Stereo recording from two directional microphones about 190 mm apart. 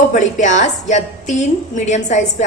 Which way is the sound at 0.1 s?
40° left (ahead or behind).